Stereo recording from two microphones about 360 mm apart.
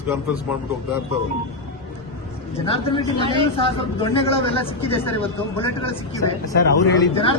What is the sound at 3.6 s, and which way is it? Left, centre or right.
A woman's voice, centre.